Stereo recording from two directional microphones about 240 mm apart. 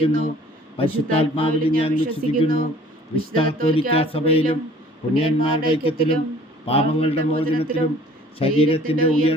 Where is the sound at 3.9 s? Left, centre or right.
Left.